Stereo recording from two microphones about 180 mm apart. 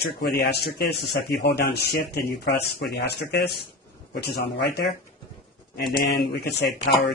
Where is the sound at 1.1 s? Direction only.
70° left (ahead or behind).